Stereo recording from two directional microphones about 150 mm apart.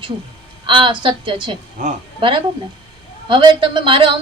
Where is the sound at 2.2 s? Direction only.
35° right (ahead or behind).